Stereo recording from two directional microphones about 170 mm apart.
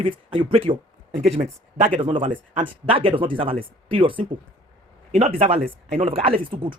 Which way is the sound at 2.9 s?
30° right (ahead or behind).